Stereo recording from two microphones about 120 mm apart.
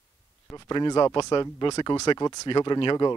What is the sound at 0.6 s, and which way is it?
Speech, 35° left (ahead or behind).